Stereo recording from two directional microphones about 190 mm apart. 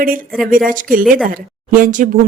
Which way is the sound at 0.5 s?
45° right (ahead or behind).